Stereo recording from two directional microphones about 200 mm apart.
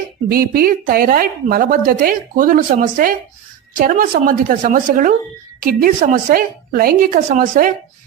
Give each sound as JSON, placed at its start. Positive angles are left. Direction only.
{"t": 0.3, "sound": "speech", "side_deg": -45}